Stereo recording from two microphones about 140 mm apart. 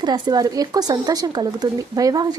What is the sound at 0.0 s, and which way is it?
Speech, 30° right (ahead or behind).